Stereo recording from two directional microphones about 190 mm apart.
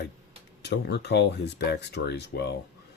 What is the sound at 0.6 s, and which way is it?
Speech, 65° left (ahead or behind).